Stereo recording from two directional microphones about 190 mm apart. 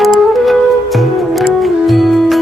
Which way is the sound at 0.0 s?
Centre (ahead or behind).